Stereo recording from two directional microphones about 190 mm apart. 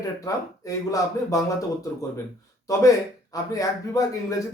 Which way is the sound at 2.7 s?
15° left (ahead or behind).